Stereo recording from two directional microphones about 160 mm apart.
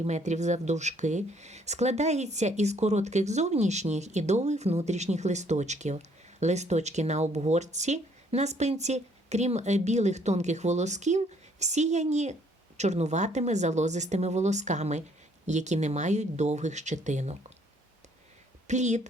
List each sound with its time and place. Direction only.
0.0 s speech: 45° right (ahead or behind)
18.7 s speech: 45° right (ahead or behind)